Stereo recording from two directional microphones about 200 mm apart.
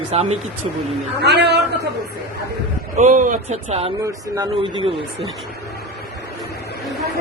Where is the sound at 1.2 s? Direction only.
60° right (ahead or behind).